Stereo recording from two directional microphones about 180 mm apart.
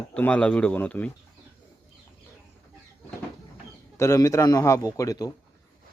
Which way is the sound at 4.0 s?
15° left (ahead or behind).